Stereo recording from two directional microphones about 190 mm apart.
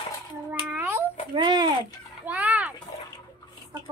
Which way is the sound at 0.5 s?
10° right (ahead or behind).